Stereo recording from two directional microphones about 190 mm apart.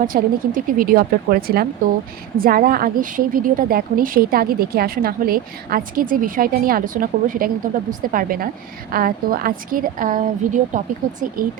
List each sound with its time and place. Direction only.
0.0 s a woman's voice: 50° right (ahead or behind)